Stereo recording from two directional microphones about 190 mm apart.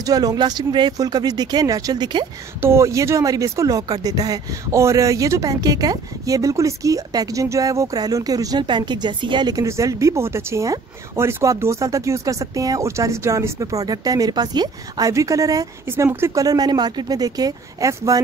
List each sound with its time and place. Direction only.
0.0 s speech: 20° right (ahead or behind)